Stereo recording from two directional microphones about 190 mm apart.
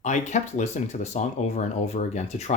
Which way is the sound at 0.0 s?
40° left (ahead or behind).